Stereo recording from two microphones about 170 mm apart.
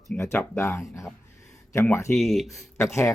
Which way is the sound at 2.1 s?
Centre (ahead or behind).